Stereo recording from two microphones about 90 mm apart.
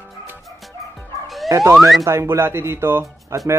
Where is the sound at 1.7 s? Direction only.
Centre (ahead or behind).